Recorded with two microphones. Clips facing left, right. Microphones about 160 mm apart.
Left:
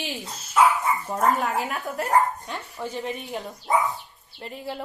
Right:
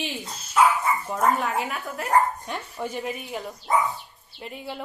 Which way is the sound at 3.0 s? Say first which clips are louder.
Even; 5° right (ahead or behind).